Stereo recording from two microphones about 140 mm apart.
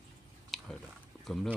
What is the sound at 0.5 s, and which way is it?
Biting, centre (ahead or behind).